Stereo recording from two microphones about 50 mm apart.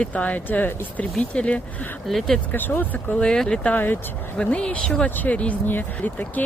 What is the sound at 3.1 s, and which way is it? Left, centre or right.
Speech, centre.